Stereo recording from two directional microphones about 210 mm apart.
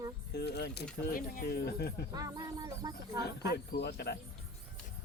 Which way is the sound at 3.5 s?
50° left (ahead or behind).